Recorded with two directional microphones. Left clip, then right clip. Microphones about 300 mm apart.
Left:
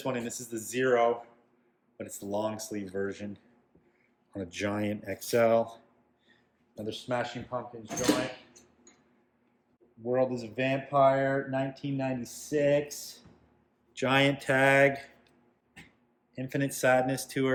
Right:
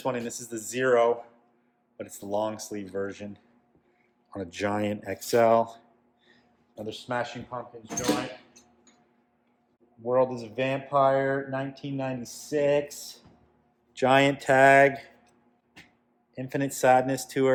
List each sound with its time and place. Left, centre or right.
0.0 s speech: centre
10.0 s speech: centre
16.3 s speech: centre